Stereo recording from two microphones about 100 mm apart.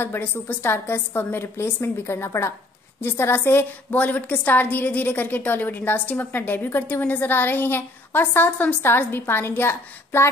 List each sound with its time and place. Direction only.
0.0 s a woman's voice: 20° left (ahead or behind)